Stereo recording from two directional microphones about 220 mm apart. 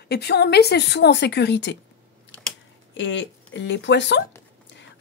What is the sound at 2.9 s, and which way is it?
Speech, 60° left (ahead or behind).